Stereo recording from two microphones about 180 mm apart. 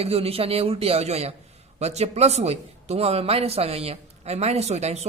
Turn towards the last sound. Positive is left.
turn(degrees=-40)  # may be behind; listen again after turning